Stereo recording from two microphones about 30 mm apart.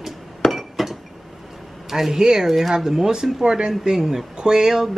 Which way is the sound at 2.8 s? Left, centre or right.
Centre.